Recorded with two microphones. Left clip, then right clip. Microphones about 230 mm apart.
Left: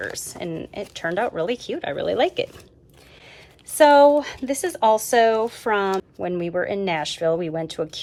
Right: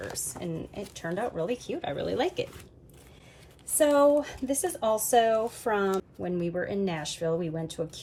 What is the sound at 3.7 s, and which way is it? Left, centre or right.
Speech, left.